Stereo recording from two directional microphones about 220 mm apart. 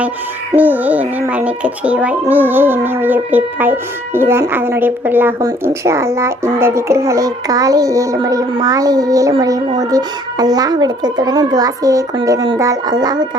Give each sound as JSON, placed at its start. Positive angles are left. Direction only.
{"t": 0.5, "sound": "a child's voice", "side_deg": -10}